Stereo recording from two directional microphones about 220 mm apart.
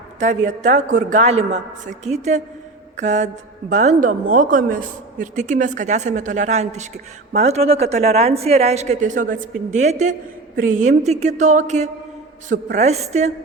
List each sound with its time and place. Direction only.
0.2 s a woman's voice: 35° right (ahead or behind)